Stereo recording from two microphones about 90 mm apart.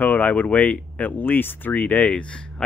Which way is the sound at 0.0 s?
20° left (ahead or behind).